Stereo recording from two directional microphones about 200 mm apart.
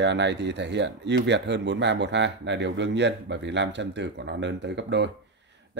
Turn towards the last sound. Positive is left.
turn(degrees=-60)  # may be behind; listen again after turning